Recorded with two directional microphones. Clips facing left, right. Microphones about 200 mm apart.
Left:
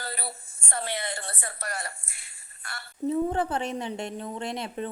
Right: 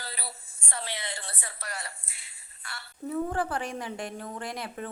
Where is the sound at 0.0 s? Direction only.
55° left (ahead or behind).